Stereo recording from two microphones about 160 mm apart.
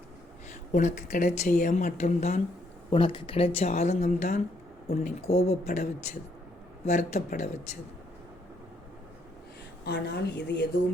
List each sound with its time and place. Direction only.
0.7 s speech: 55° left (ahead or behind)
2.9 s speech: 30° left (ahead or behind); by 7.5 s 45° left (ahead or behind)
9.8 s a woman's voice: 90° left